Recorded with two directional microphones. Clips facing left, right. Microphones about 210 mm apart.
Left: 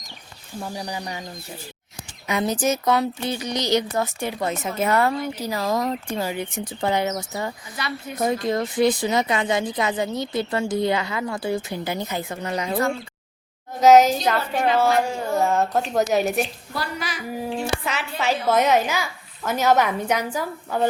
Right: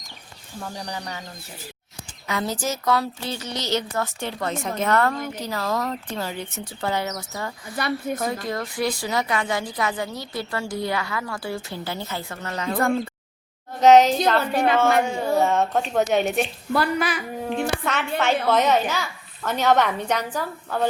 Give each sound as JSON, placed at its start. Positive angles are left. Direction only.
{"t": 0.6, "sound": "a woman's voice", "side_deg": 10}
{"t": 2.2, "sound": "a woman's voice", "side_deg": 20}
{"t": 7.8, "sound": "speech", "side_deg": -50}
{"t": 8.2, "sound": "speech", "side_deg": 20}
{"t": 13.8, "sound": "speech", "side_deg": 5}
{"t": 16.7, "sound": "speech", "side_deg": -55}
{"t": 17.8, "sound": "a woman's voice", "side_deg": 5}